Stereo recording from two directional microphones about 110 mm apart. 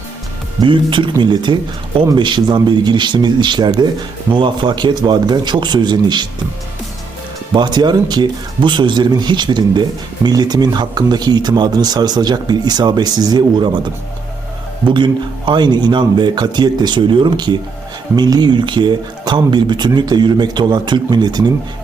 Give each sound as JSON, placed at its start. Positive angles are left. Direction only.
{"t": 0.6, "sound": "a man's voice", "side_deg": -50}
{"t": 7.5, "sound": "a man's voice", "side_deg": -40}
{"t": 14.8, "sound": "a man's voice", "side_deg": -45}